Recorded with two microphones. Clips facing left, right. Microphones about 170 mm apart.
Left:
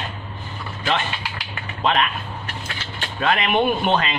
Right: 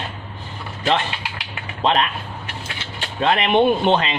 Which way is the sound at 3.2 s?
25° right (ahead or behind).